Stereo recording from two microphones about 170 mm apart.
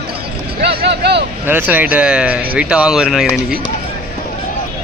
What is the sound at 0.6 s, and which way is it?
Vehicle, 70° right (ahead or behind).